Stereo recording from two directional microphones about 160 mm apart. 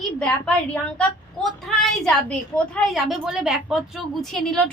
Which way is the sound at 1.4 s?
5° left (ahead or behind).